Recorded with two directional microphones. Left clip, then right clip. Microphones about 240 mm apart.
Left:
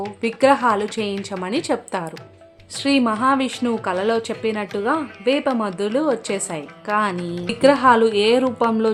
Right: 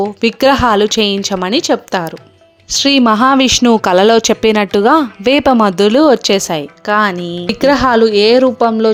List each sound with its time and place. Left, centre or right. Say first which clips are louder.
0.0 s speech: right 7 dB; right